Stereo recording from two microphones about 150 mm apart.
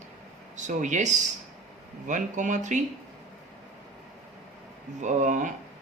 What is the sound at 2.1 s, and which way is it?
Speech, 55° right (ahead or behind).